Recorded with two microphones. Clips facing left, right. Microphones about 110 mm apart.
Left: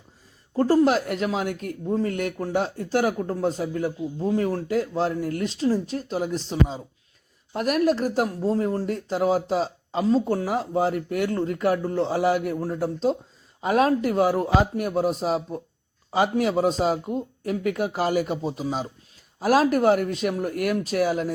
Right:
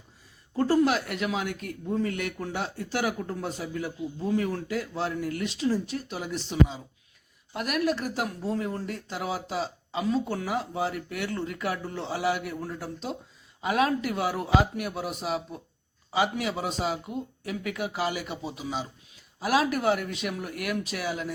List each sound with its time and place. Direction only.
0.5 s speech: 40° left (ahead or behind)
1.8 s speech: 30° left (ahead or behind)
2.0 s speech: 45° left (ahead or behind)